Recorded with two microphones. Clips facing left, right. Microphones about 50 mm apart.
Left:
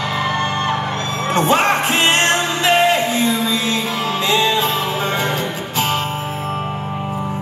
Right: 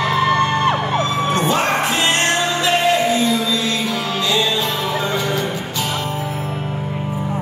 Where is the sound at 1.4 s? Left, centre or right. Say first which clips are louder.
Left 6 dB; left.